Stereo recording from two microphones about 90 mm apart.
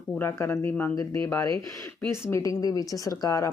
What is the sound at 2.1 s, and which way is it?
Speech, 35° left (ahead or behind).